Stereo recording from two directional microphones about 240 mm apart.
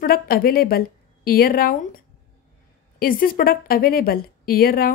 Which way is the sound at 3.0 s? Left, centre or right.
Left.